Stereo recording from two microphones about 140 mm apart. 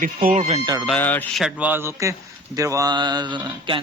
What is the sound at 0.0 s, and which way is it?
Speech, 75° right (ahead or behind).